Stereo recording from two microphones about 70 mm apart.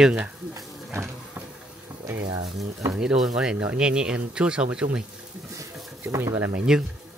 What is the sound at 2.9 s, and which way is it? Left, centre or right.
Speech, centre.